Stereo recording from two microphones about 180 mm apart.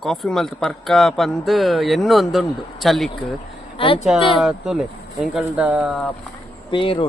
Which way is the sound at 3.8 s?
30° left (ahead or behind).